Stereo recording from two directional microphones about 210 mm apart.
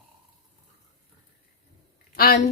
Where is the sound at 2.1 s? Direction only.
45° left (ahead or behind).